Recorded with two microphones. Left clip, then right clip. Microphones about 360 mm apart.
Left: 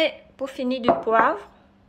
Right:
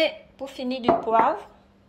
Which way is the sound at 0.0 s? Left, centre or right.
Centre.